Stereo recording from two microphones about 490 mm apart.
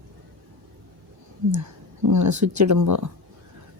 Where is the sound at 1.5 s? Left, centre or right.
Right.